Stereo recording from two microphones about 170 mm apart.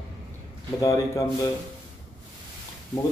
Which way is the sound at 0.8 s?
20° left (ahead or behind).